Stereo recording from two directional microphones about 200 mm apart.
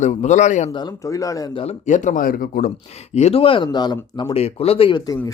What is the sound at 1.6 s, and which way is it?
Speech, 40° left (ahead or behind).